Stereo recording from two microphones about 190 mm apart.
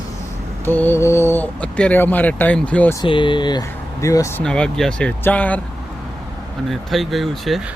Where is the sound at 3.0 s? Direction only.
25° left (ahead or behind); by 5.6 s 10° left (ahead or behind).